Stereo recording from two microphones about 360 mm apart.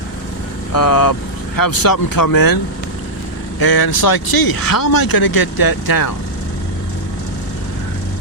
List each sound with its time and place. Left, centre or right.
0.7 s speech: left
3.6 s speech: left